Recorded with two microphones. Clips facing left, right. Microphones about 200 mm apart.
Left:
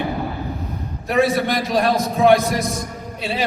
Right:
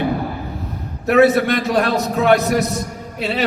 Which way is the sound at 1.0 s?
70° right (ahead or behind).